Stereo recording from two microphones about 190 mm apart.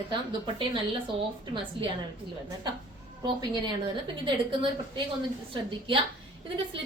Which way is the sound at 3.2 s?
25° right (ahead or behind).